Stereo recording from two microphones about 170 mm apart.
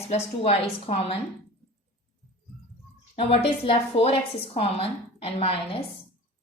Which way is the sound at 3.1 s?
35° left (ahead or behind).